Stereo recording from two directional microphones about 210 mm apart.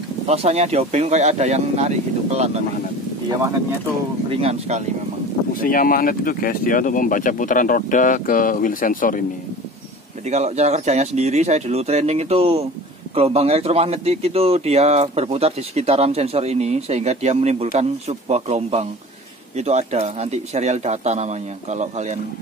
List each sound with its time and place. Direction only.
0.3 s speech: 30° right (ahead or behind)
4.3 s speech: 30° right (ahead or behind)
5.5 s speech: 40° left (ahead or behind)
10.3 s speech: 35° right (ahead or behind)